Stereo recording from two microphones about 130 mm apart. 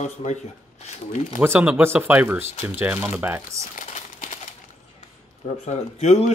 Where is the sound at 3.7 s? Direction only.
80° left.